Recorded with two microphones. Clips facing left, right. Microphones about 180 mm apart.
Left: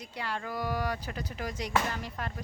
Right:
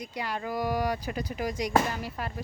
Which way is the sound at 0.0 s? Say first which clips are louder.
Right 3 dB; 15° right (ahead or behind).